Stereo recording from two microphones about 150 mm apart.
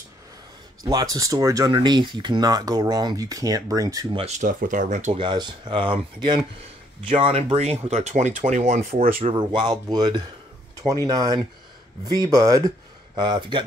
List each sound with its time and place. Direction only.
1.1 s speech: 20° right (ahead or behind)
4.2 s speech: 50° right (ahead or behind)
5.2 s speech: 30° right (ahead or behind)
7.1 s speech: 40° right (ahead or behind)
9.2 s speech: 30° right (ahead or behind)
13.1 s speech: 30° right (ahead or behind)